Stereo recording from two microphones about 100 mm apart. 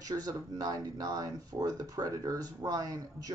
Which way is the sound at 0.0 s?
40° right (ahead or behind).